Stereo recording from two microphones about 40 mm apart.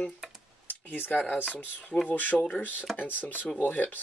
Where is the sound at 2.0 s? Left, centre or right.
Left.